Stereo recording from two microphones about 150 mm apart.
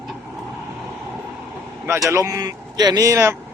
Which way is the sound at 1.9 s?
20° right (ahead or behind).